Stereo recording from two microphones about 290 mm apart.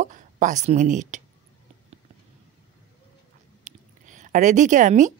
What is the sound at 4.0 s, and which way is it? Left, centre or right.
A woman's voice, right.